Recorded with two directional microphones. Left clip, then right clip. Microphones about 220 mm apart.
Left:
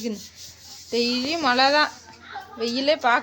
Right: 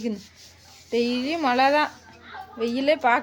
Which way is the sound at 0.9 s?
5° right (ahead or behind).